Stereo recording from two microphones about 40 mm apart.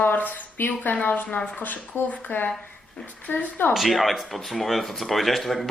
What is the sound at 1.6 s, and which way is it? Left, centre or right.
Speech, left.